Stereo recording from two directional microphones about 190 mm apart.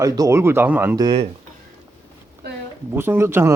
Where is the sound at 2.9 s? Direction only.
10° right (ahead or behind).